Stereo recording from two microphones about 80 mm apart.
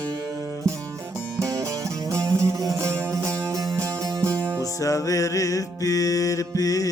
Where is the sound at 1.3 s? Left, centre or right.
Right.